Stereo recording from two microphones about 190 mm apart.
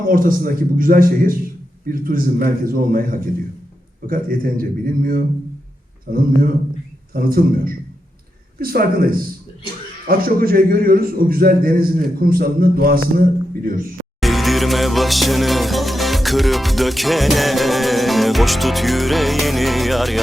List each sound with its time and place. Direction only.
0.1 s a man's voice: 45° right (ahead or behind)
14.2 s music: centre (ahead or behind)